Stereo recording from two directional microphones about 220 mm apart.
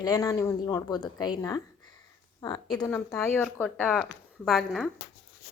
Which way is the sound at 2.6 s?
5° left (ahead or behind).